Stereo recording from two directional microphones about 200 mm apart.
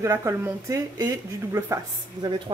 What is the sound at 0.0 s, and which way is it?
Speech, 15° right (ahead or behind).